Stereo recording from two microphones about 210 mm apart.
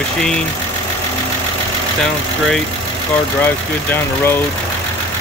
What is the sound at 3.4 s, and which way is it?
Speech, 10° left (ahead or behind).